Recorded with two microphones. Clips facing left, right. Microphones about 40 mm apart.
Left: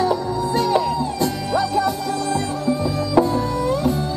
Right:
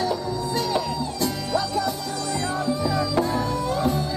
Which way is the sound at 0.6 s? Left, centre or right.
Left.